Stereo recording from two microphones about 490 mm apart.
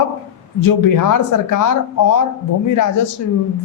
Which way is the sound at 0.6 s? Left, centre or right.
Left.